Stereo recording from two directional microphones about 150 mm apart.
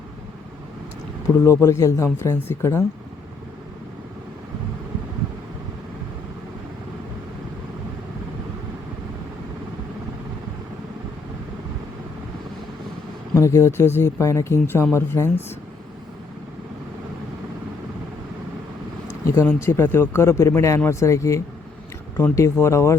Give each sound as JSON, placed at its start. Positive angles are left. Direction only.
{"t": 1.5, "sound": "speech", "side_deg": 15}
{"t": 13.3, "sound": "speech", "side_deg": 20}
{"t": 19.3, "sound": "speech", "side_deg": 15}